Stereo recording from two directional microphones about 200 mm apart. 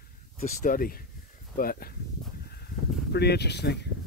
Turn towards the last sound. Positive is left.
turn(degrees=55)  # may be behind; listen again after turning